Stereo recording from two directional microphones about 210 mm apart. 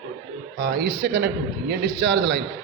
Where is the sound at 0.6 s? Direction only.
45° right (ahead or behind).